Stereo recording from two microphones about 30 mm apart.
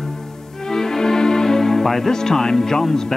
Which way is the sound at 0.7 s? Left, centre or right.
Centre.